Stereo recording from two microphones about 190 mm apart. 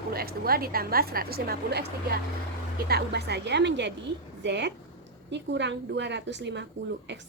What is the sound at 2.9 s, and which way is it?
A woman's voice, 60° right (ahead or behind).